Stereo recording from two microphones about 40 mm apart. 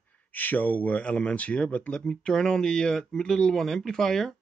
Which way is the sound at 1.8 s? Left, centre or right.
Left.